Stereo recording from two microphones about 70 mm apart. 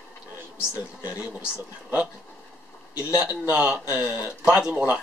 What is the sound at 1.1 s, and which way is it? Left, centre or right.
Speech, centre.